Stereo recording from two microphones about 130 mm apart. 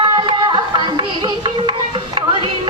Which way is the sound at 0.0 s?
35° right (ahead or behind).